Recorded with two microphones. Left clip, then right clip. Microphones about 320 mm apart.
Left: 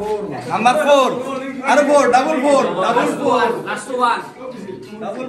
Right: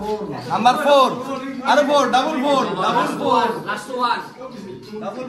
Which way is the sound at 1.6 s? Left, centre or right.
Centre.